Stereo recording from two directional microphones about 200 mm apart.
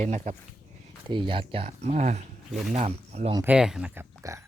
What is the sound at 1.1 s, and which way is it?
Speech, 25° right (ahead or behind).